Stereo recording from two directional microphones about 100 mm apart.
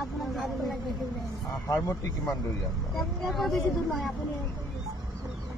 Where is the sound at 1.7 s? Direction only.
30° left (ahead or behind).